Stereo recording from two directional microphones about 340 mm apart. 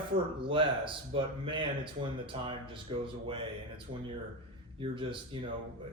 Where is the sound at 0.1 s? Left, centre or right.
Centre.